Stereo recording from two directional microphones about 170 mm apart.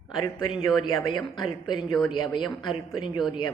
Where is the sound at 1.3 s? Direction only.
25° left (ahead or behind).